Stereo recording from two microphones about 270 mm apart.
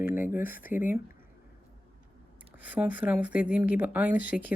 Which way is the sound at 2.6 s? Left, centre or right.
Centre.